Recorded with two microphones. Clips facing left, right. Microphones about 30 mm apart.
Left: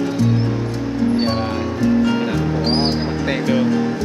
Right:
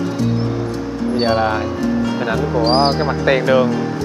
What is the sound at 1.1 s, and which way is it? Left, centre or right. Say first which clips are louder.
Speech: right 3 dB; centre.